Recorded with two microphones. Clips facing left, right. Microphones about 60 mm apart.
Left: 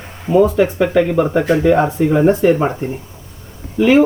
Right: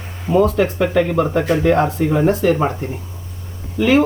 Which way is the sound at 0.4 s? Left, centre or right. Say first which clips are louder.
Left 2 dB; centre.